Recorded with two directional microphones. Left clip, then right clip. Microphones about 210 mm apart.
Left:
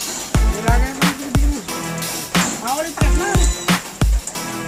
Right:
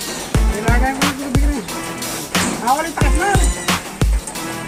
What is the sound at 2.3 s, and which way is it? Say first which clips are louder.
Music: right 4 dB; centre (ahead or behind).